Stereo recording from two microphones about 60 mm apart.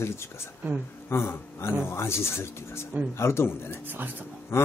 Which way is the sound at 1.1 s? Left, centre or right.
Left.